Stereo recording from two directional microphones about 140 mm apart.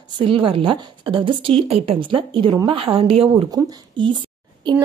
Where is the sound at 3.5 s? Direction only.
30° right (ahead or behind).